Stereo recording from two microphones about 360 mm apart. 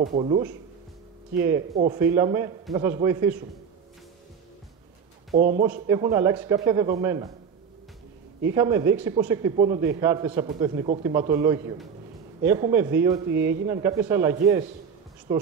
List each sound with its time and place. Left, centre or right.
0.0 s a man's voice: centre
1.8 s a man's voice: centre
5.3 s speech: right
5.9 s a man's voice: centre
8.5 s a man's voice: centre